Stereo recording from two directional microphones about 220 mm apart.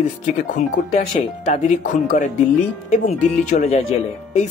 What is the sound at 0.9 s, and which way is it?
Speech, 35° left (ahead or behind).